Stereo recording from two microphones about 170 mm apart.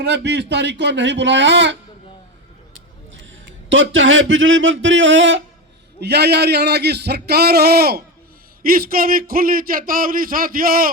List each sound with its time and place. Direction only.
0.0 s speech: 85° right
3.7 s speech: 90° right
6.0 s speech: 75° right (ahead or behind); by 10.9 s 60° right (ahead or behind)